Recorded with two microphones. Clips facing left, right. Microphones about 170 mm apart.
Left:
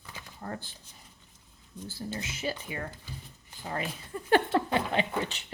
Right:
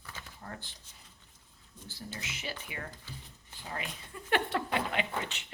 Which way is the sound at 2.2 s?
40° left (ahead or behind).